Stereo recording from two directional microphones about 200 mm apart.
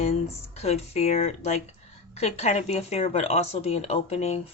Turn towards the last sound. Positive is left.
turn(degrees=30)  # may be behind; listen again after turning